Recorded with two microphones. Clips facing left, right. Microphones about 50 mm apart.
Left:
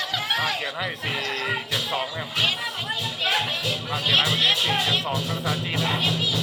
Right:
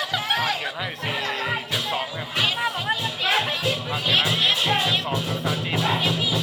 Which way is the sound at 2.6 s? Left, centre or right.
Right.